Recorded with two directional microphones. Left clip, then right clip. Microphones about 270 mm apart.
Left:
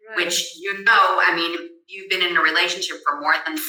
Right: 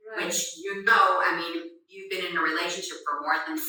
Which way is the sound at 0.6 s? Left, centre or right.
Left.